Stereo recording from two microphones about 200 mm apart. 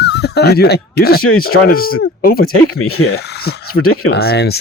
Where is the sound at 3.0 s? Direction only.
90° left.